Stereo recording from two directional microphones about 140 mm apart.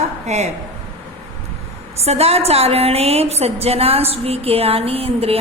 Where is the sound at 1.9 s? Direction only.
50° right (ahead or behind).